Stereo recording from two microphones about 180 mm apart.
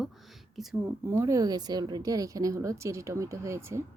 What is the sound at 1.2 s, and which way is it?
Speech, 20° right (ahead or behind).